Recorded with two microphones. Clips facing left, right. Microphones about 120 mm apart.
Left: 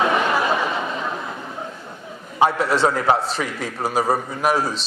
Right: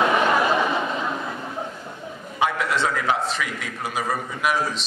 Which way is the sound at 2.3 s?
35° left (ahead or behind).